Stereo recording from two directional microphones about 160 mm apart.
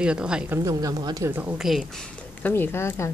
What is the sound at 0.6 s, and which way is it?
Speech, 20° right (ahead or behind).